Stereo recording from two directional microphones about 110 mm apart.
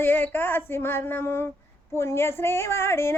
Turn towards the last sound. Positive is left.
turn(degrees=25)  # may be behind; listen again after turning